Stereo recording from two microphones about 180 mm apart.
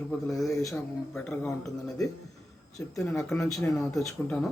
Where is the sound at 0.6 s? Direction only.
Centre (ahead or behind).